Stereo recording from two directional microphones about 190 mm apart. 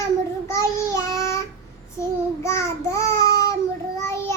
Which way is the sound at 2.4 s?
15° left (ahead or behind).